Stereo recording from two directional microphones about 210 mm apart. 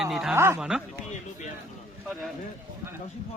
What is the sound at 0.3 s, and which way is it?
Speech, 10° right (ahead or behind).